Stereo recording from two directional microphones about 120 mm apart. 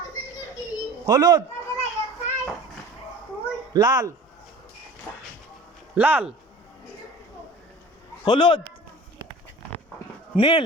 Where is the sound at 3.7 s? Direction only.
35° right (ahead or behind).